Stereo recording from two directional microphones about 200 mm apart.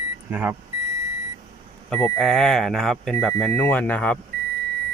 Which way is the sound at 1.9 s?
10° left (ahead or behind).